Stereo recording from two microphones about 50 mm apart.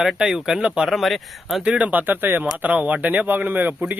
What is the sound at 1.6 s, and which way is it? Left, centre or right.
Speech, right.